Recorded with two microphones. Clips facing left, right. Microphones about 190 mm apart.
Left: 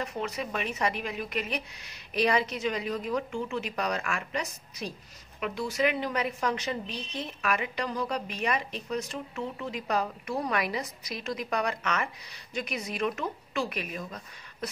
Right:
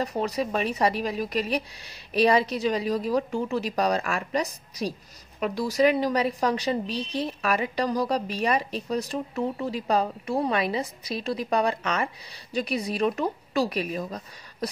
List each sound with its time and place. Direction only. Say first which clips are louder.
0.0 s a woman's voice: right 6 dB; 35° right (ahead or behind)